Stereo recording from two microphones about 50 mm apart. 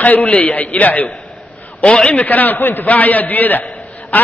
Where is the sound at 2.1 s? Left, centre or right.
Left.